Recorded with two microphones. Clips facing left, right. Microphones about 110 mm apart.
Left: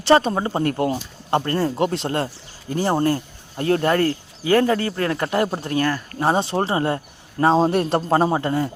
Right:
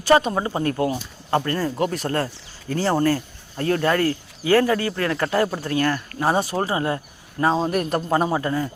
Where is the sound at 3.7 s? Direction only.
35° left (ahead or behind).